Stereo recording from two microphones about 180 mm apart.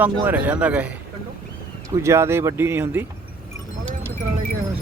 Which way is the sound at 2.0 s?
15° right (ahead or behind).